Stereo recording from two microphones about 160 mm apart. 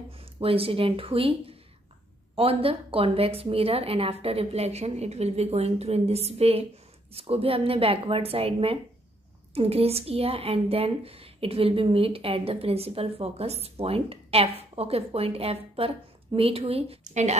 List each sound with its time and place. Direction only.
0.2 s a woman's voice: 35° right (ahead or behind)